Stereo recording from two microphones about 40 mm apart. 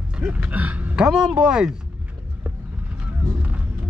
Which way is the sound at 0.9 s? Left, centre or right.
Right.